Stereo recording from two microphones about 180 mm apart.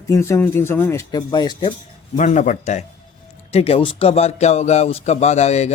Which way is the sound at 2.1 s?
45° left (ahead or behind).